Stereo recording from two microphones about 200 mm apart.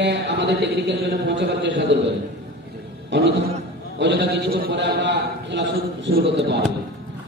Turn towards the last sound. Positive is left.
turn(degrees=-60)  # may be behind; listen again after turning